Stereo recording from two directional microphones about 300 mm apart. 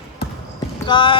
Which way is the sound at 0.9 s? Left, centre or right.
Centre.